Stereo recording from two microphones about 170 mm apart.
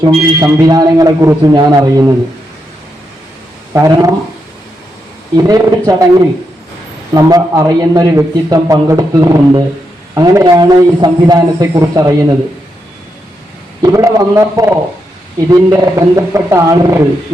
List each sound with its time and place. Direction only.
0.0 s a man's voice: 20° right (ahead or behind)
3.7 s speech: 20° right (ahead or behind)
5.4 s a man's voice: 20° right (ahead or behind)
13.8 s a man's voice: 20° right (ahead or behind)